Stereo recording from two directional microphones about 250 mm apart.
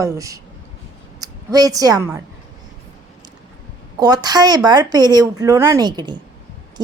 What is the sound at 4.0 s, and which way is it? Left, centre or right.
Speech, centre.